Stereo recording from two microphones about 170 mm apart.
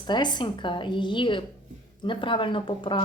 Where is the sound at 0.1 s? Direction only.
25° left (ahead or behind).